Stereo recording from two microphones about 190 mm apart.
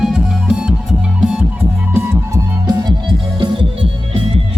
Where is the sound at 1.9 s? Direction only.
15° right (ahead or behind).